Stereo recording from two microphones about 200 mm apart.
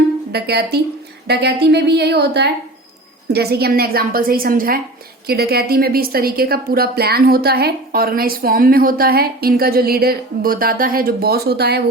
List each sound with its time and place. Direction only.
0.3 s a woman's voice: 55° right (ahead or behind)